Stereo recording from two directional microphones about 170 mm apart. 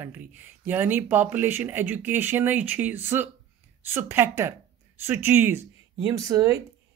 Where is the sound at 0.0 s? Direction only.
10° right (ahead or behind).